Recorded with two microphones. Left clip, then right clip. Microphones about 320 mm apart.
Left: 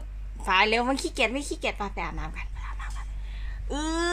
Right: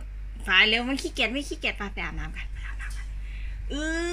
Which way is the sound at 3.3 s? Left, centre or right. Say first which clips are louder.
Left 2 dB; centre.